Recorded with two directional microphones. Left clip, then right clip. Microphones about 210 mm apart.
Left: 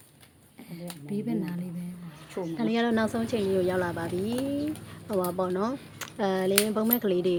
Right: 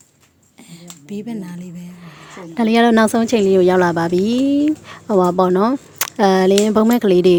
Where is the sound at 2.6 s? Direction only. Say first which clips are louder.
Right 14 dB; 50° right (ahead or behind).